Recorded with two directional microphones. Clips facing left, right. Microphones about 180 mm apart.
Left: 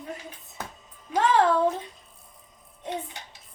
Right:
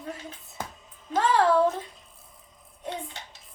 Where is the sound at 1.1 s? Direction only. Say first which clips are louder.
Left 1 dB; 20° left (ahead or behind).